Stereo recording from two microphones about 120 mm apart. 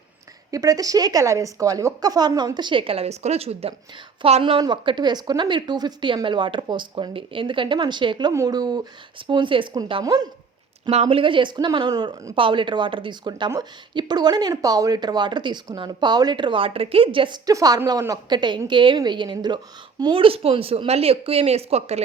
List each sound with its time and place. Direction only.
0.5 s speech: 30° right (ahead or behind); by 4.6 s 55° right (ahead or behind)
4.6 s speech: 40° right (ahead or behind)
8.3 s speech: 30° right (ahead or behind); by 10.0 s 45° right (ahead or behind)
10.0 s speech: 35° right (ahead or behind)
10.9 s speech: 65° right (ahead or behind)
11.2 s speech: 45° right (ahead or behind); by 22.0 s 60° right (ahead or behind)